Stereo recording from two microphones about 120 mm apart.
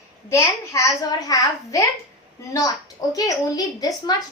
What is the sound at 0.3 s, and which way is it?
A woman's voice, 25° left (ahead or behind).